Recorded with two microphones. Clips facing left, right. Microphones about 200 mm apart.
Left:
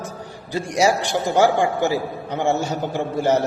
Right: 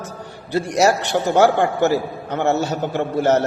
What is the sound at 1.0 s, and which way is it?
Speech, 60° right (ahead or behind).